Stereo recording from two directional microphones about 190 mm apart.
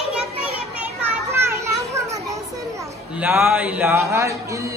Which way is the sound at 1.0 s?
15° right (ahead or behind).